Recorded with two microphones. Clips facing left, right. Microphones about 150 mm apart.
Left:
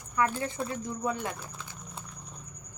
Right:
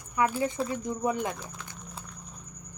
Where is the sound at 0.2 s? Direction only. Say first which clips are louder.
Right 2 dB; 15° right (ahead or behind).